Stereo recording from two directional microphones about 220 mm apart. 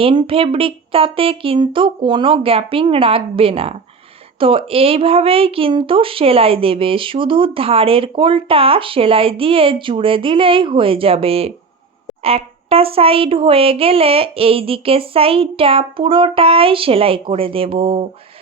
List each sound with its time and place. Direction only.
0.0 s a woman's voice: 25° right (ahead or behind)